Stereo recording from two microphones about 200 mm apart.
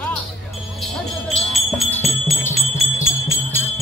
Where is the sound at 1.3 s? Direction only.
5° left (ahead or behind).